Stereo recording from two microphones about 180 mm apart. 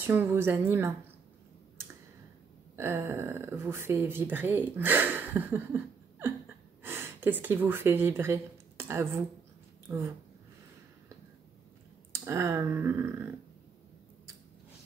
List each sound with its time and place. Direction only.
0.0 s speech: 10° right (ahead or behind)
2.7 s speech: 15° right (ahead or behind)
12.1 s speech: 15° right (ahead or behind)